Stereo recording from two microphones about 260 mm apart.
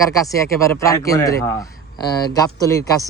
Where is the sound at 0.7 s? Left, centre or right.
Centre.